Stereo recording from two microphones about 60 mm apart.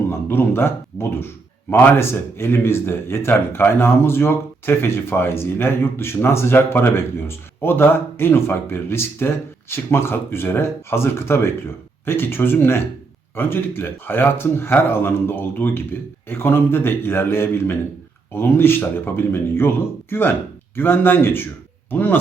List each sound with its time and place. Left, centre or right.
0.1 s speech: left
1.7 s speech: left
2.0 s speech: left